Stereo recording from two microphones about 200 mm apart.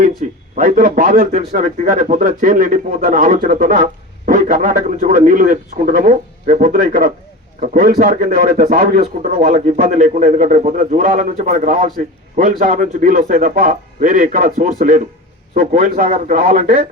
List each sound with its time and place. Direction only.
0.5 s a man's voice: 45° right (ahead or behind)